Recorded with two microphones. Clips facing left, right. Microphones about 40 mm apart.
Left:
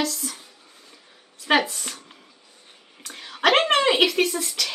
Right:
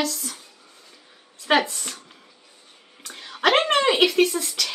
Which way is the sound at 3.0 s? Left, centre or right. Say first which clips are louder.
Even; centre.